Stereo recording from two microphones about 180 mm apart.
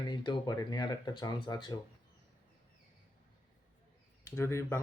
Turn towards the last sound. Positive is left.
turn(degrees=15)  # may be behind; listen again after turning